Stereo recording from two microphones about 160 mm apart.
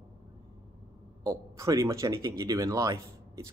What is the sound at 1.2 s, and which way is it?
Speech, 20° right (ahead or behind).